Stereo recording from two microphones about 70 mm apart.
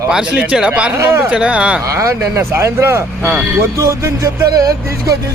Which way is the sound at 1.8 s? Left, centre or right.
Right.